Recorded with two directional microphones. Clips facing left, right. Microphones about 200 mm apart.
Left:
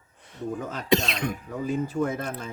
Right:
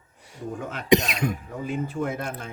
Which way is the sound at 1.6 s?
35° left (ahead or behind).